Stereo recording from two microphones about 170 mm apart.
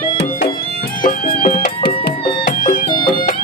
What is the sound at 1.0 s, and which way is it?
Music, 50° left (ahead or behind).